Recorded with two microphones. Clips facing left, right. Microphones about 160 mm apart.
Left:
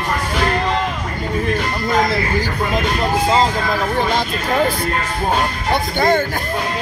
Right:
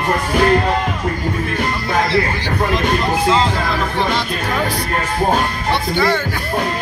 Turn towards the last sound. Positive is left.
turn(degrees=50)  # may be behind; listen again after turning